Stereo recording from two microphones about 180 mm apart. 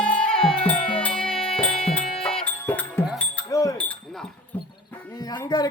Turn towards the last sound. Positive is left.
turn(degrees=20)  # may be behind; listen again after turning